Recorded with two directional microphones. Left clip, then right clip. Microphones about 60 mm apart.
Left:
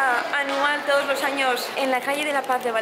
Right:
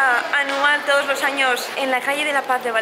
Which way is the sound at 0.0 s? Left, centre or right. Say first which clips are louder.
Right 4 dB; centre.